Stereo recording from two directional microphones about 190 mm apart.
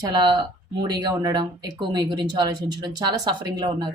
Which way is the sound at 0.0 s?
20° right (ahead or behind).